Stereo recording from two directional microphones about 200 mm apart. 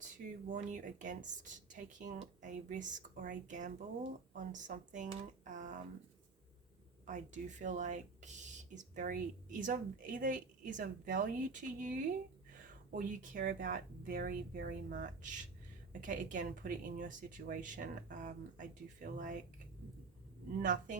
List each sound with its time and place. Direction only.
0.0 s speech: 40° right (ahead or behind)
7.1 s speech: 40° right (ahead or behind)
20.6 s speech: 40° right (ahead or behind)